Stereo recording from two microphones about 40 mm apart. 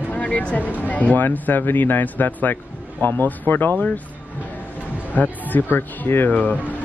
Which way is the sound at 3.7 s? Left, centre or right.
Left.